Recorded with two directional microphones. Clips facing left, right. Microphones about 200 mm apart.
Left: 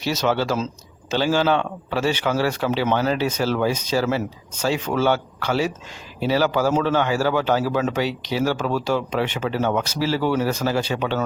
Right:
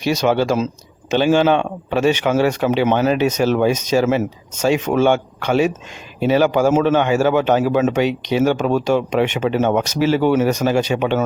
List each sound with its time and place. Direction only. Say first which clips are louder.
0.0 s a man's voice: right 5 dB; 15° right (ahead or behind)